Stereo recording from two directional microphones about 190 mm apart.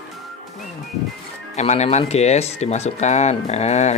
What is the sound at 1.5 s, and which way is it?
Speech, 35° left (ahead or behind).